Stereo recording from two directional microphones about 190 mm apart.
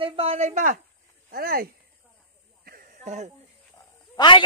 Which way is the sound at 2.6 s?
45° right (ahead or behind).